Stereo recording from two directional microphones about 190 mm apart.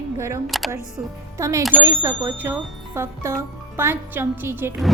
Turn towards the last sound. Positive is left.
turn(degrees=-10)  # may be behind; listen again after turning